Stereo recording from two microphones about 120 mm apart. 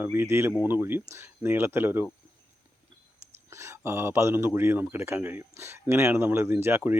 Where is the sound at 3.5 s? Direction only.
20° right (ahead or behind).